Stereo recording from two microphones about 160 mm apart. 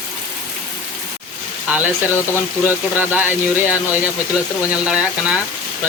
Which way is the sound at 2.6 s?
10° right (ahead or behind).